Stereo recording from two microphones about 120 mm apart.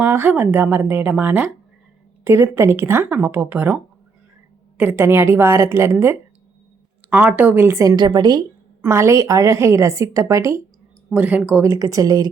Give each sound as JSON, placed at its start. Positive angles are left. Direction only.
{"t": 0.0, "sound": "speech", "side_deg": -15}
{"t": 4.8, "sound": "a woman's voice", "side_deg": -15}
{"t": 8.8, "sound": "a woman's voice", "side_deg": -25}
{"t": 11.1, "sound": "speech", "side_deg": -15}
{"t": 11.6, "sound": "a woman's voice", "side_deg": -25}